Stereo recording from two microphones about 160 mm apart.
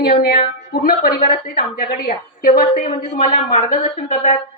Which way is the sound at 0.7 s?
65° left (ahead or behind).